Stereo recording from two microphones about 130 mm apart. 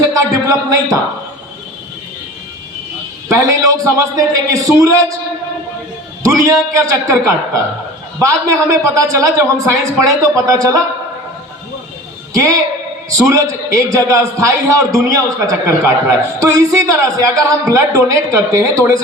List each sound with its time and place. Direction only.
0.0 s a sound: 25° right (ahead or behind)
3.2 s a man's voice: 25° right (ahead or behind)
6.2 s a man's voice: 25° right (ahead or behind)
12.3 s a woman's voice: 25° right (ahead or behind)